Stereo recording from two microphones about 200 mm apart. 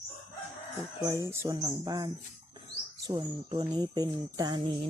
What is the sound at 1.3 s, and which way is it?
Bird, 15° right (ahead or behind).